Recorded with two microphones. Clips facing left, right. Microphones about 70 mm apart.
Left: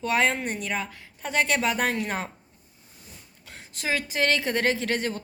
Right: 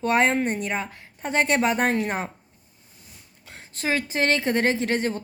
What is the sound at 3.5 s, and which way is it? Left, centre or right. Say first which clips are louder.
Speech: right 3 dB; right.